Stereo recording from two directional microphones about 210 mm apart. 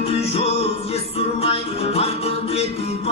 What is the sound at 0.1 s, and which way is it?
Music, 30° left (ahead or behind).